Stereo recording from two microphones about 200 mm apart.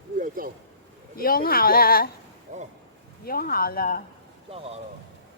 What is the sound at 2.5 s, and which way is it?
Speech, 35° right (ahead or behind).